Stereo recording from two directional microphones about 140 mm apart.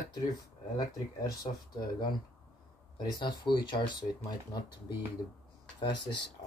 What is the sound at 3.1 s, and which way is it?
Speech, 30° left (ahead or behind).